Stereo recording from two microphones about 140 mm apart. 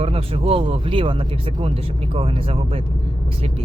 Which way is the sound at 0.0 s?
45° right (ahead or behind).